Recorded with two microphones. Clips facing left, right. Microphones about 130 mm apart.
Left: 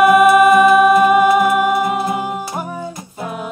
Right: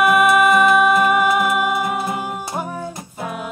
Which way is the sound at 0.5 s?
10° left (ahead or behind).